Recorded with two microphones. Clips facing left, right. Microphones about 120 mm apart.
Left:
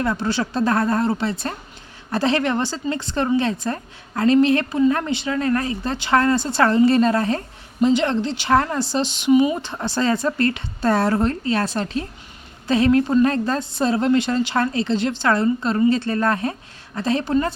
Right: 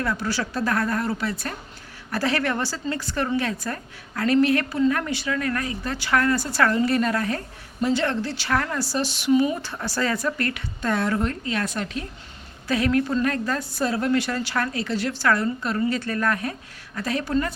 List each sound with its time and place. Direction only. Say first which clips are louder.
0.0 s a woman's voice: left 4 dB; 25° left (ahead or behind)